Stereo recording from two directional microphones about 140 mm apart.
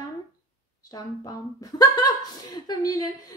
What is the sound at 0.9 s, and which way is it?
Speech, 25° left (ahead or behind).